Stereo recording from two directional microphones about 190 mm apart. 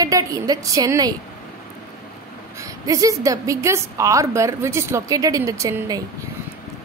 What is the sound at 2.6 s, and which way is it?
A woman's voice, 15° right (ahead or behind).